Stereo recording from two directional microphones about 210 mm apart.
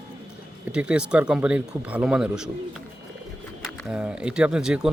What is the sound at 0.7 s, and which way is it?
Speech, 5° right (ahead or behind).